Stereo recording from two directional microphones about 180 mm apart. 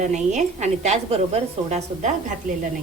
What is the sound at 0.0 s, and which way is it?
A woman's voice, 40° right (ahead or behind).